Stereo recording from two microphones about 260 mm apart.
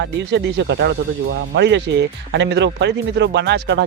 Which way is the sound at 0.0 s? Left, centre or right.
Right.